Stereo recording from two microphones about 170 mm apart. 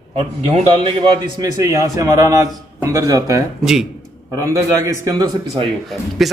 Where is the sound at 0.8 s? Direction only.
25° right (ahead or behind).